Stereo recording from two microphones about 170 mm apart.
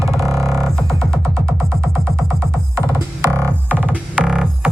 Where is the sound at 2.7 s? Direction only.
15° right (ahead or behind).